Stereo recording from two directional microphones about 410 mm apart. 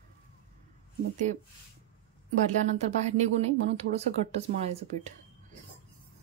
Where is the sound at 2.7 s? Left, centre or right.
Centre.